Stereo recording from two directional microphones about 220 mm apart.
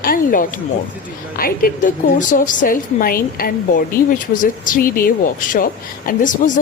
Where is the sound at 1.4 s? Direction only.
40° left (ahead or behind).